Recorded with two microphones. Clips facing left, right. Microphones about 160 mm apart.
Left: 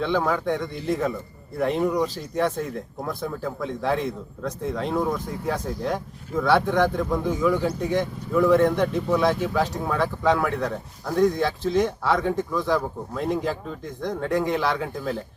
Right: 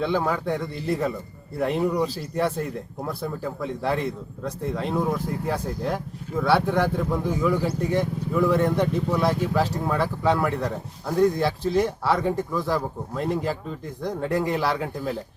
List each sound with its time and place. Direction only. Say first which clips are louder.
0.0 s a man's voice: left 1 dB; 5° right (ahead or behind)